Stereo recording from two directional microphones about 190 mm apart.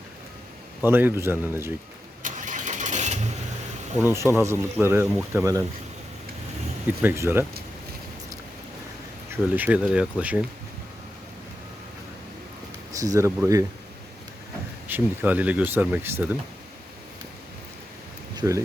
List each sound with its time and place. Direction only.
0.8 s speech: 10° right (ahead or behind)
2.2 s vehicle: 40° right (ahead or behind)
4.1 s speech: 15° right (ahead or behind)
7.0 s speech: 10° right (ahead or behind)
9.3 s speech: 10° right (ahead or behind)
12.9 s speech: 15° right (ahead or behind)
14.8 s speech: 10° right (ahead or behind)
18.3 s speech: 15° right (ahead or behind)